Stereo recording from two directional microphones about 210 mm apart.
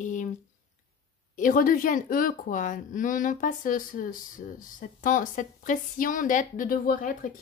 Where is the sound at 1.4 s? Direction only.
40° left (ahead or behind).